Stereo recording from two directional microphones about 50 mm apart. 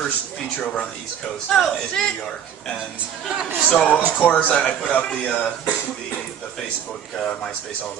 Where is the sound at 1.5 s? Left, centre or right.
Centre.